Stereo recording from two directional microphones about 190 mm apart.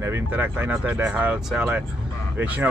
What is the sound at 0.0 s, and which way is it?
Speech, 10° right (ahead or behind).